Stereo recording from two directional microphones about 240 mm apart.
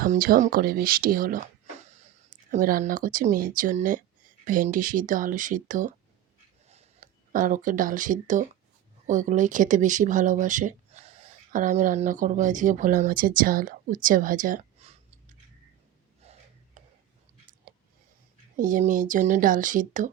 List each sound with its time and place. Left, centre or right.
0.0 s speech: right
16.2 s a sound: right
18.5 s speech: right